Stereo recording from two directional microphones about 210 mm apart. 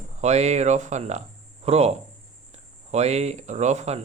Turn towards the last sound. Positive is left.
turn(degrees=-30)  # may be behind; listen again after turning